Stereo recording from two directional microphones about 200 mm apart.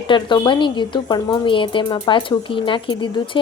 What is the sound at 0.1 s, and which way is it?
A woman's voice, 25° left (ahead or behind).